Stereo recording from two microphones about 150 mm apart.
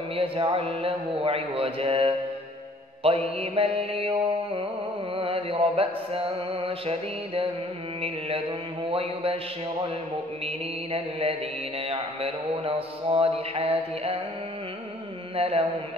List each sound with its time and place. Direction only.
0.1 s mantra: 35° right (ahead or behind)
10.4 s mantra: 40° right (ahead or behind)
15.3 s mantra: 40° right (ahead or behind)